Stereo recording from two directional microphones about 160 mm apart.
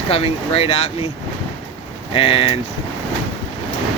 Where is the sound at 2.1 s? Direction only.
35° left (ahead or behind).